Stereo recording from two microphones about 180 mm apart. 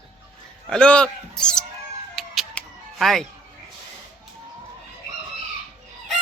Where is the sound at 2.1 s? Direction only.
Centre (ahead or behind).